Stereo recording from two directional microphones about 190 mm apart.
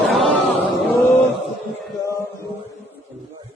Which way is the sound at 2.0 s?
15° left (ahead or behind).